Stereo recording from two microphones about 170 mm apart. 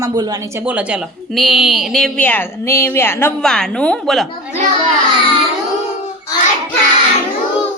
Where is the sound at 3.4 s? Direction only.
5° left (ahead or behind).